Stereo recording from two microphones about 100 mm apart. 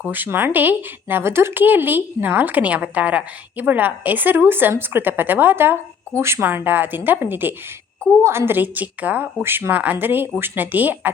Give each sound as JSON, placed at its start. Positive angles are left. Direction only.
{"t": 0.1, "sound": "speech", "side_deg": -20}